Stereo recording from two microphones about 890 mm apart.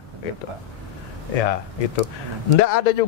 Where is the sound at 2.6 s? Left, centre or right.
Left.